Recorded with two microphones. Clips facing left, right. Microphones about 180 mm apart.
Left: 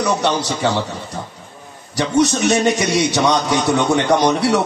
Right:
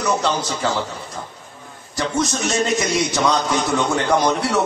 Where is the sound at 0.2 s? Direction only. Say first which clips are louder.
Left 3 dB; 70° left (ahead or behind).